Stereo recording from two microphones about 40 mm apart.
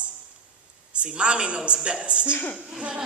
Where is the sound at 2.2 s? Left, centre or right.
Left.